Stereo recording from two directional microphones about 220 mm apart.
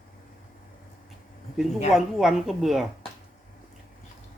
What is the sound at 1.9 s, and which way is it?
Speech, centre (ahead or behind).